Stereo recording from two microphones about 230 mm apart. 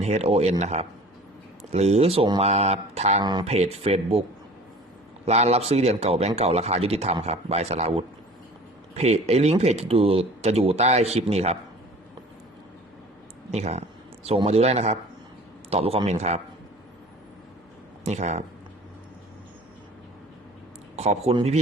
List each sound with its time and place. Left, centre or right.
0.0 s speech: right
5.2 s speech: right
13.5 s speech: right
18.0 s speech: right
20.9 s a man's voice: right